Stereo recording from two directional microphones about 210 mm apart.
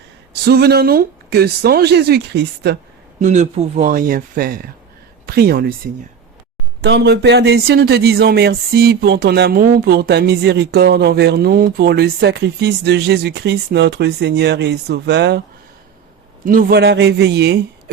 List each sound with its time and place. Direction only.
0.4 s speech: 50° right (ahead or behind)
3.2 s speech: 40° right (ahead or behind); by 15.4 s 55° right (ahead or behind)
16.5 s speech: 45° right (ahead or behind)